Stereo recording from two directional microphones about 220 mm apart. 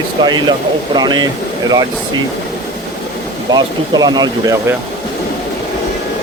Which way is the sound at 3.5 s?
20° right (ahead or behind).